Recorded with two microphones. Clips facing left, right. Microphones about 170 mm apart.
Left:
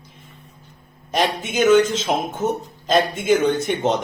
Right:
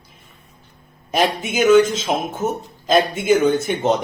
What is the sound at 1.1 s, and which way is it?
A man's voice, 10° right (ahead or behind).